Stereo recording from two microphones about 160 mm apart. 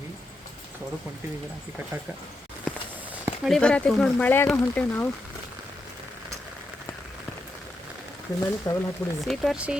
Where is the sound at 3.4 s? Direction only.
5° left (ahead or behind).